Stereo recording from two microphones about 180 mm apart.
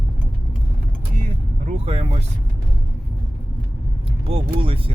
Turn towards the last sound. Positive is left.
turn(degrees=-30)  # may be behind; listen again after turning